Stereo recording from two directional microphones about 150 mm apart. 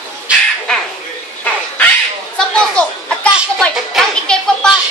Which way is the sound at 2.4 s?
5° left (ahead or behind).